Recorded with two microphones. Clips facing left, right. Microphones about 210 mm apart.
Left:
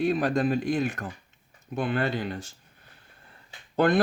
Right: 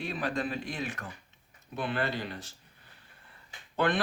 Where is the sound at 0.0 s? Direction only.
45° left (ahead or behind).